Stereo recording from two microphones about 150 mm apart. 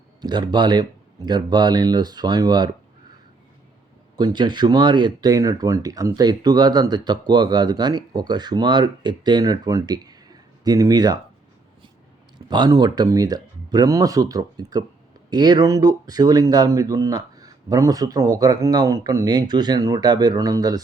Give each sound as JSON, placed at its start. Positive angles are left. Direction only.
{"t": 0.2, "sound": "speech", "side_deg": -30}
{"t": 4.2, "sound": "speech", "side_deg": -30}
{"t": 12.5, "sound": "speech", "side_deg": -30}